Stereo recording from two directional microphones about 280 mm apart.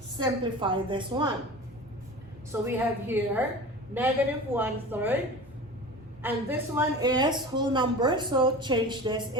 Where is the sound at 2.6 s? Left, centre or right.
Centre.